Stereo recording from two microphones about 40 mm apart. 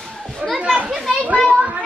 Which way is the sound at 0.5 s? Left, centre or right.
Right.